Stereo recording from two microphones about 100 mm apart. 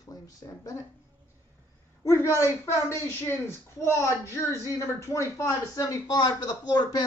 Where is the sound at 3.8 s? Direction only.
30° left (ahead or behind).